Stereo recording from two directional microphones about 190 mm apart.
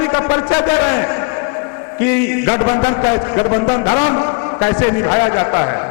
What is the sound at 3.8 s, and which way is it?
A man's voice, 25° left (ahead or behind).